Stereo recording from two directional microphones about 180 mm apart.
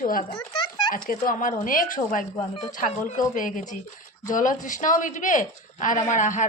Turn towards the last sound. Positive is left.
turn(degrees=45)  # may be behind; listen again after turning